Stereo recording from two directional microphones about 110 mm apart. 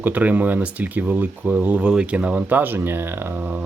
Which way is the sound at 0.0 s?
15° right (ahead or behind).